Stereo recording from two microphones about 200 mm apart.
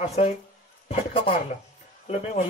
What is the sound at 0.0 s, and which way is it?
Speech, 30° left (ahead or behind).